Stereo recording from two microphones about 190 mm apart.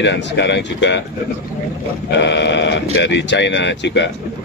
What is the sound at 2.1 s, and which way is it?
Speech, 65° left (ahead or behind).